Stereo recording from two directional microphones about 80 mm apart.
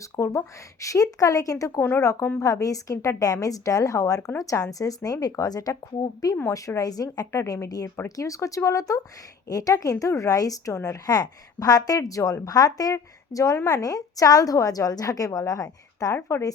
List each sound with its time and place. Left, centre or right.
0.0 s speech: left